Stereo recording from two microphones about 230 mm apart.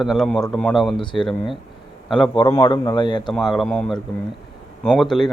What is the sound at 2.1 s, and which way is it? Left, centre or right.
A man's voice, left.